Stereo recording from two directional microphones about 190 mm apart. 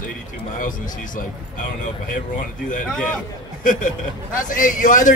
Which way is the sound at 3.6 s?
40° left (ahead or behind).